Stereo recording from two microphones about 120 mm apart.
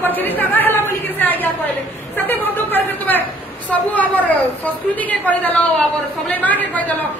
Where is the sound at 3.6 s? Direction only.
15° left (ahead or behind).